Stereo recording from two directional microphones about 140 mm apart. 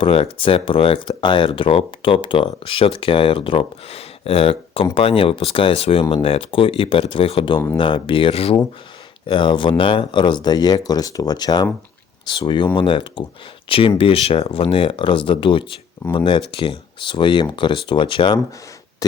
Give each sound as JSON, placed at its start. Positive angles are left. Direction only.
{"t": 0.0, "sound": "speech", "side_deg": 40}